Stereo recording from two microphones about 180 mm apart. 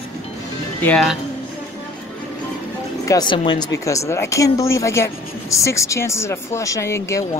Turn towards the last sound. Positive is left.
turn(degrees=15)  # may be behind; listen again after turning